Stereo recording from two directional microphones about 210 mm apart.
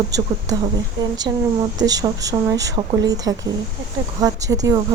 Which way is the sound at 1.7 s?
20° right (ahead or behind).